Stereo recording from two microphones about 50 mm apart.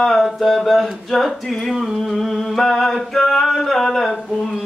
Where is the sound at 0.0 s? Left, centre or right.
Centre.